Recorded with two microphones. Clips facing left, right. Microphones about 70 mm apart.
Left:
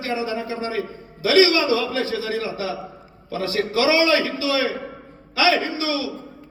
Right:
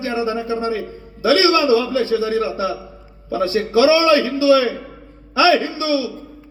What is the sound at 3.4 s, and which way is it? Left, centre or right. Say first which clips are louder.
Speech: right 6 dB; left.